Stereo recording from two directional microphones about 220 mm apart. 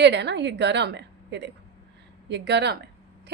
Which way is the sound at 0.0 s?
50° right (ahead or behind).